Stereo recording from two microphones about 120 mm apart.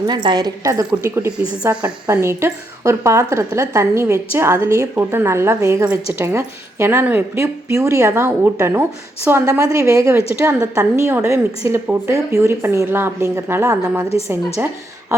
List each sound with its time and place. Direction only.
0.1 s a woman's voice: 40° right (ahead or behind)